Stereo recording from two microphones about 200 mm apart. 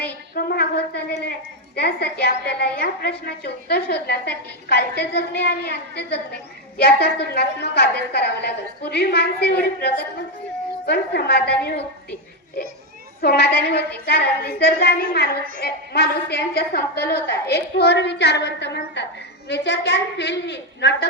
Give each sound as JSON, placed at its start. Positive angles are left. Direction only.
{"t": 0.3, "sound": "a sound", "side_deg": 50}
{"t": 0.9, "sound": "a woman's voice", "side_deg": 55}
{"t": 10.8, "sound": "a woman's voice", "side_deg": 55}
{"t": 13.2, "sound": "a woman's voice", "side_deg": 55}